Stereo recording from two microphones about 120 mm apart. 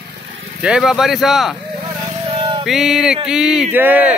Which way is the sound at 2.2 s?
45° right (ahead or behind).